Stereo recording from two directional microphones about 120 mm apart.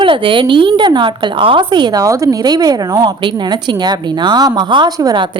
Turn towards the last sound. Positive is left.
turn(degrees=-40)  # may be behind; listen again after turning